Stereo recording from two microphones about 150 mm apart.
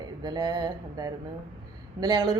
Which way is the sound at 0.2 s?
30° right (ahead or behind).